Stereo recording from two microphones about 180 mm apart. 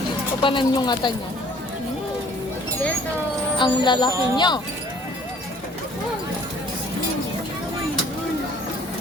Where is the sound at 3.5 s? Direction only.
25° left (ahead or behind).